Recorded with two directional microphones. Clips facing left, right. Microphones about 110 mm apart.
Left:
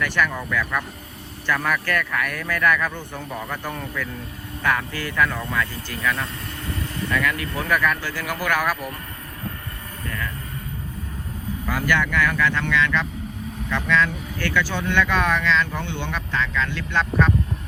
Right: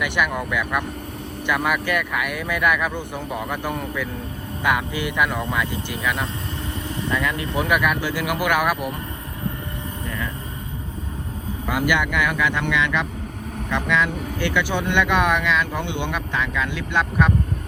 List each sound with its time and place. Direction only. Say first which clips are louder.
0.0 s speech: right 1 dB; 15° right (ahead or behind)
11.7 s speech: right 1 dB; 15° right (ahead or behind)